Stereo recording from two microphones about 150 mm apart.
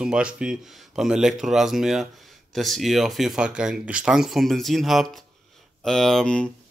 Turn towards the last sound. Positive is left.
turn(degrees=5)  # may be behind; listen again after turning